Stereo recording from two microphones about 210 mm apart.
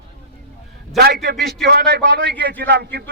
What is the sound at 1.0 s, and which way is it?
A man's voice, 50° right (ahead or behind).